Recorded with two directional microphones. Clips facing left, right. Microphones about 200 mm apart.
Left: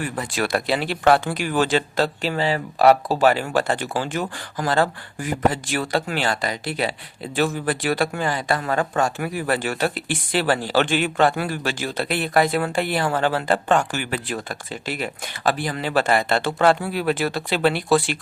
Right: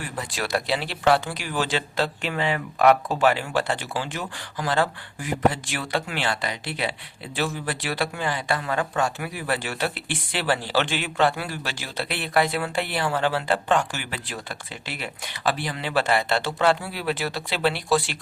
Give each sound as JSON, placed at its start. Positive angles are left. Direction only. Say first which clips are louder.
{"t": 0.0, "sound": "speech", "louder": "left 6 dB", "side_deg": 55}